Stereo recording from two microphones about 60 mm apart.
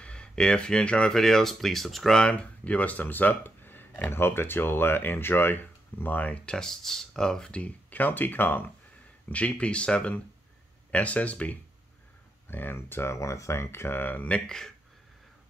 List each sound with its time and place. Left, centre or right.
0.0 s speech: centre
1.1 s speech: centre
7.6 s speech: left
9.3 s speech: left
12.4 s speech: left
13.2 s speech: left
14.4 s speech: centre